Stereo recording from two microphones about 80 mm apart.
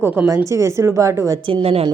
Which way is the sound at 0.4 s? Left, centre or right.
Right.